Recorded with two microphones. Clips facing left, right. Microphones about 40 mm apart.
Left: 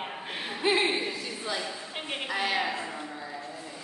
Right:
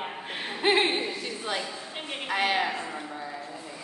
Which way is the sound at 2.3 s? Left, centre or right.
Right.